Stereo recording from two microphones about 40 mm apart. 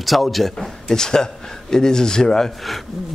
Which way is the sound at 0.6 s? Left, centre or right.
Centre.